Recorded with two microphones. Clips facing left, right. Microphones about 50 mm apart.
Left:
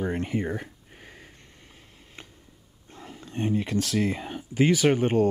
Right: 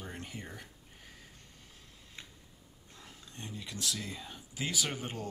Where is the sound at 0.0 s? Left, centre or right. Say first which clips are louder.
Left 16 dB; left.